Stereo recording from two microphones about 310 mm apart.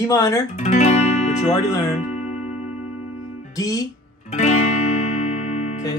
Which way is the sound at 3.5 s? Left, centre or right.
Centre.